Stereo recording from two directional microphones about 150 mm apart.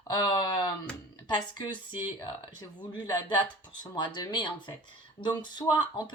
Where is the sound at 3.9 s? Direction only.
30° left (ahead or behind).